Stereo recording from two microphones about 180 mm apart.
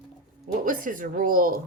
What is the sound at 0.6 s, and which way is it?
Speech, 50° right (ahead or behind).